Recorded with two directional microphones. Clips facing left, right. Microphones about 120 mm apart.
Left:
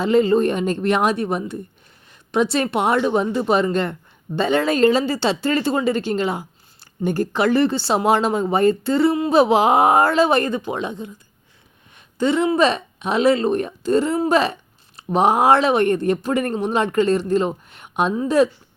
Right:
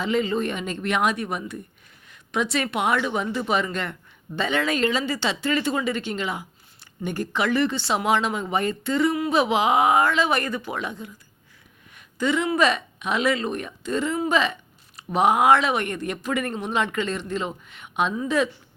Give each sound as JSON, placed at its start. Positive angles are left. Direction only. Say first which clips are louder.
{"t": 0.0, "sound": "a woman's voice", "louder": "left 8 dB", "side_deg": 35}